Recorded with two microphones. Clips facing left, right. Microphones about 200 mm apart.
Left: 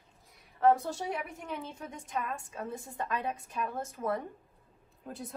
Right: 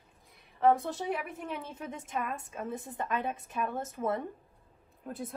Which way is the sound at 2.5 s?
20° right (ahead or behind).